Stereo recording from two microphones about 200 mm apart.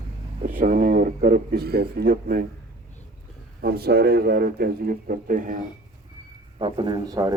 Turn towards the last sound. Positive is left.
turn(degrees=-20)  # may be behind; listen again after turning